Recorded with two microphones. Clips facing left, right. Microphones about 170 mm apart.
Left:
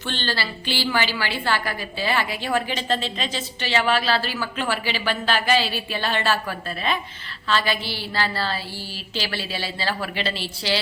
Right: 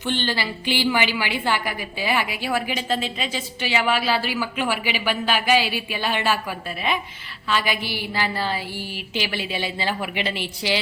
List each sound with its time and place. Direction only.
0.0 s a woman's voice: 15° right (ahead or behind)